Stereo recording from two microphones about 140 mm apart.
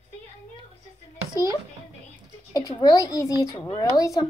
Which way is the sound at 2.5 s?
25° left (ahead or behind).